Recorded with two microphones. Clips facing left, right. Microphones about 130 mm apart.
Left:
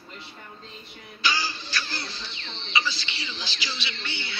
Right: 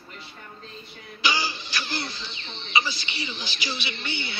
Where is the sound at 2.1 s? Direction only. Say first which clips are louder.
Right 1 dB; 15° right (ahead or behind).